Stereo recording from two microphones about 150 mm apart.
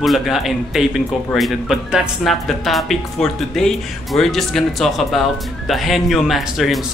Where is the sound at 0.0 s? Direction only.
Centre (ahead or behind).